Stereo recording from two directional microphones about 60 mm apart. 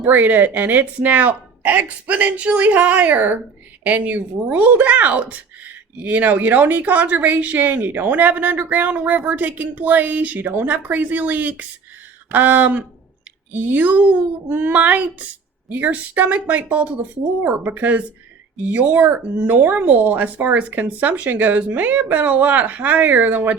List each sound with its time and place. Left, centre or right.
0.0 s speech: right